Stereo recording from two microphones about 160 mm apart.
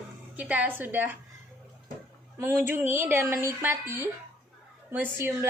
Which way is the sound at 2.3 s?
15° right (ahead or behind).